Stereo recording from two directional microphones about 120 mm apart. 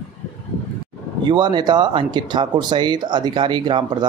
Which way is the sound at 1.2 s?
40° right (ahead or behind).